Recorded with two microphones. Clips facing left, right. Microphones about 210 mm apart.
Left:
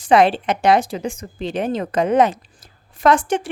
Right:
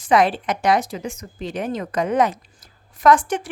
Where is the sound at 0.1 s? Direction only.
25° left (ahead or behind).